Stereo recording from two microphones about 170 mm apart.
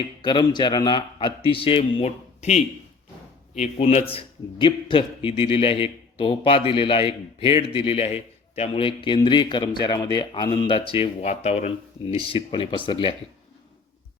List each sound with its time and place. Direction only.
0.0 s a man's voice: 25° left (ahead or behind)